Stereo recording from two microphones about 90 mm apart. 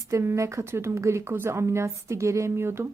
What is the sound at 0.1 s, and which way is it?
A woman's voice, 30° right (ahead or behind).